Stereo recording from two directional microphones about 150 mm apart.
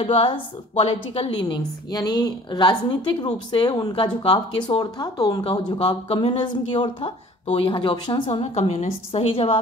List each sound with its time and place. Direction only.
0.0 s a woman's voice: 35° left (ahead or behind)
1.4 s a woman's voice: 30° left (ahead or behind)